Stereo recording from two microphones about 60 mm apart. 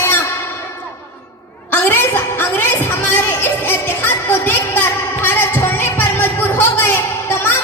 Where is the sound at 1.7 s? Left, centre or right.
Left.